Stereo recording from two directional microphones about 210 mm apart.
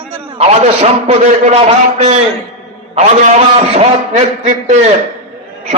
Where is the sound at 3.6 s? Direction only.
30° right (ahead or behind).